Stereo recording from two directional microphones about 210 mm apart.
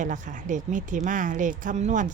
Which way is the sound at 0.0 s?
35° right (ahead or behind).